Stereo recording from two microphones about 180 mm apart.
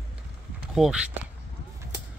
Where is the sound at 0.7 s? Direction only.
5° right (ahead or behind).